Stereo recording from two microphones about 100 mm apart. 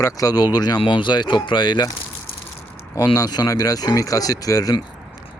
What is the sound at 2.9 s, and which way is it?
Speech, 35° left (ahead or behind).